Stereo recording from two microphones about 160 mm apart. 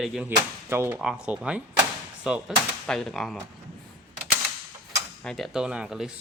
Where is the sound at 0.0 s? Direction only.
Centre (ahead or behind).